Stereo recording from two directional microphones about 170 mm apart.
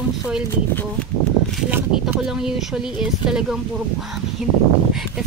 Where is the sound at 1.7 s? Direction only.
5° right (ahead or behind).